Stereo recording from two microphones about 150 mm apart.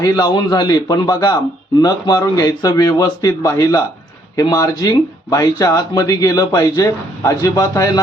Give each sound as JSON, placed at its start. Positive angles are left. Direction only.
{"t": 0.0, "sound": "speech", "side_deg": 25}